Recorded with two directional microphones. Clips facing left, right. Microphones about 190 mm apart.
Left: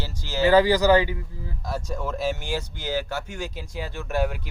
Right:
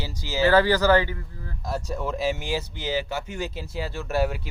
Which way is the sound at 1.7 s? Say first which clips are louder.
Right 1 dB; 10° right (ahead or behind).